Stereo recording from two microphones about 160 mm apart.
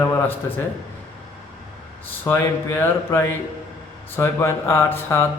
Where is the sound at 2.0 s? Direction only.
15° left (ahead or behind).